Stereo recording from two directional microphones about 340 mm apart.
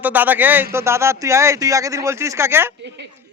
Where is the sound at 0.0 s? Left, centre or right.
Centre.